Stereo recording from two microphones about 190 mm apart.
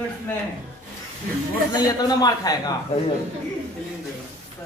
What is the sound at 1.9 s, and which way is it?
Speech, 20° left (ahead or behind).